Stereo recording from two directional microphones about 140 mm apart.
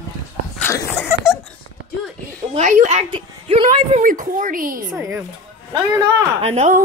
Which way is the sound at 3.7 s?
60° right (ahead or behind).